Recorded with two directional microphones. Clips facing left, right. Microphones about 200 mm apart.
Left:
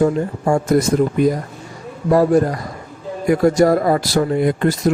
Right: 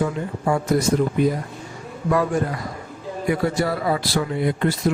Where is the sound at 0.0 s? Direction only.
45° left (ahead or behind).